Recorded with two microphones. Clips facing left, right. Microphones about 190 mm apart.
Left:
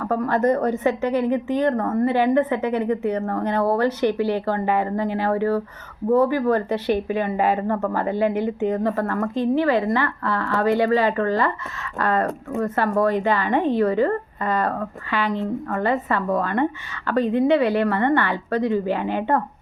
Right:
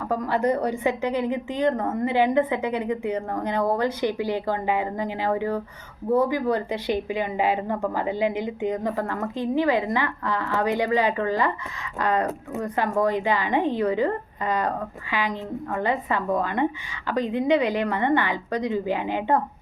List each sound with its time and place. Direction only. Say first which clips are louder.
0.0 s a woman's voice: left 3 dB; 15° right (ahead or behind)
7.3 s speech: left 2 dB; 45° left (ahead or behind)
7.7 s a woman's voice: left 3 dB; 15° right (ahead or behind)